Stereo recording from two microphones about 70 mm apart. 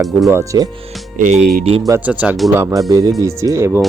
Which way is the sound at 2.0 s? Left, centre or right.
Right.